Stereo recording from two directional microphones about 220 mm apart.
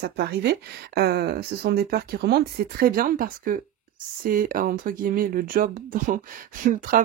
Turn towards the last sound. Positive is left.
turn(degrees=-35)  # may be behind; listen again after turning